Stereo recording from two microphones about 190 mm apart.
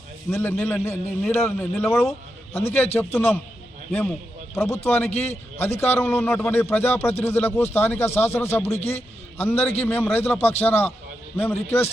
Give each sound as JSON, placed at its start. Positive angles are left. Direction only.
{"t": 0.3, "sound": "a man's voice", "side_deg": 10}
{"t": 4.5, "sound": "a man's voice", "side_deg": 15}
{"t": 8.8, "sound": "a man's voice", "side_deg": 35}
{"t": 9.4, "sound": "a man's voice", "side_deg": 10}